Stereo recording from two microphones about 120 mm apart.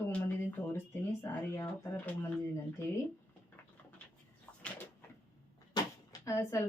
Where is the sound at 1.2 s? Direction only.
20° left (ahead or behind).